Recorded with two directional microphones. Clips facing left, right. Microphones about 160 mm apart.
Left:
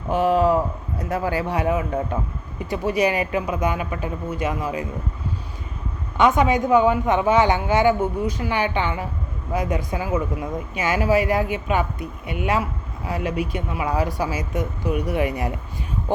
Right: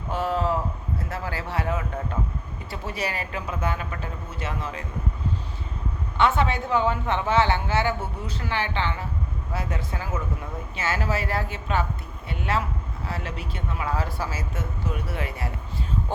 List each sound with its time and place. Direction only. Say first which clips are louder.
0.1 s speech: left 7 dB; 15° left (ahead or behind)
6.1 s speech: left 5 dB; 15° left (ahead or behind)